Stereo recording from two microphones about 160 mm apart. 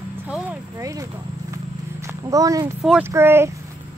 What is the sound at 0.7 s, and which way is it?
Speech, 20° right (ahead or behind).